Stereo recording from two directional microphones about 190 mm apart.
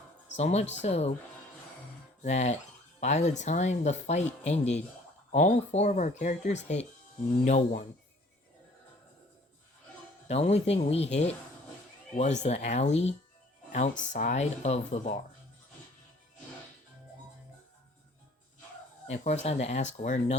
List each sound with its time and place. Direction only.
0.3 s speech: 35° left (ahead or behind)
2.2 s speech: 35° left (ahead or behind)
10.2 s speech: 35° left (ahead or behind)
19.0 s speech: 35° left (ahead or behind)